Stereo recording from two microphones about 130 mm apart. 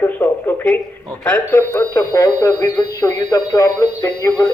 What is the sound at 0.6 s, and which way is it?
A man's voice, 10° left (ahead or behind).